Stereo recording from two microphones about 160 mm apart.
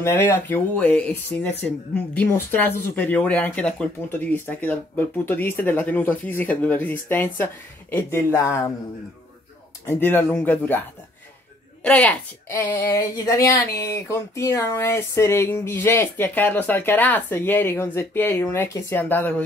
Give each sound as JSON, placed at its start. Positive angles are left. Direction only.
{"t": 0.0, "sound": "speech", "side_deg": 10}
{"t": 9.8, "sound": "speech", "side_deg": 15}
{"t": 11.8, "sound": "speech", "side_deg": 5}